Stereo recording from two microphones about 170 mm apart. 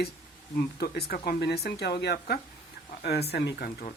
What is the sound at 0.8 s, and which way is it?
Speech, 65° left (ahead or behind).